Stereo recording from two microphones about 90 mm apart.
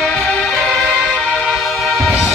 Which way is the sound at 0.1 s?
Centre (ahead or behind).